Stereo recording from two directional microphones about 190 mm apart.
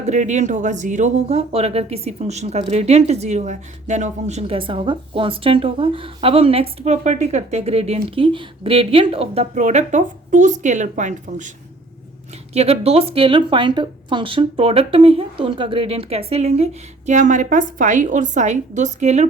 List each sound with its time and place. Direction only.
0.0 s speech: 40° right (ahead or behind)
12.5 s speech: 35° right (ahead or behind)